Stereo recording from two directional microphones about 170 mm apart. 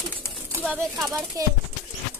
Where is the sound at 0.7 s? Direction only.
Centre (ahead or behind).